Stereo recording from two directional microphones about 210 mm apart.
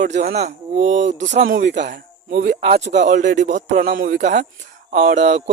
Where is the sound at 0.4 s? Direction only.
35° right (ahead or behind); by 2.6 s 50° right (ahead or behind).